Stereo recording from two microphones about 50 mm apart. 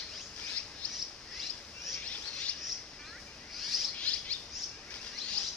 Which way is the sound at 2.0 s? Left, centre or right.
Left.